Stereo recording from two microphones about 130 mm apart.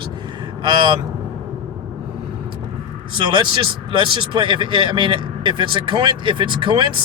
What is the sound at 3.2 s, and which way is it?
Speech, 40° right (ahead or behind).